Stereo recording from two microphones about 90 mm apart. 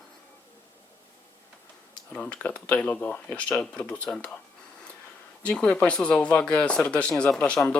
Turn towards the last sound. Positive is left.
turn(degrees=15)  # may be behind; listen again after turning